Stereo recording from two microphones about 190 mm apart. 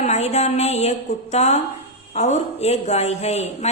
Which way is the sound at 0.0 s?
35° left (ahead or behind).